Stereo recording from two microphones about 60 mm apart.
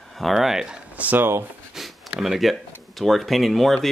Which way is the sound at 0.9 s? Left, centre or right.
Right.